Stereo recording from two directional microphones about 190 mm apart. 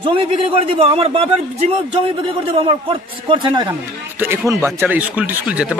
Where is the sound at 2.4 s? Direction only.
30° right (ahead or behind).